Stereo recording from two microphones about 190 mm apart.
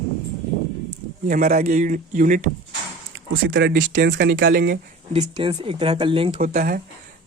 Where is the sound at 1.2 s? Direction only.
45° right (ahead or behind).